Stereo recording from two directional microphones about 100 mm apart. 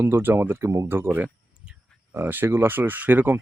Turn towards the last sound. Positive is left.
turn(degrees=-20)  # may be behind; listen again after turning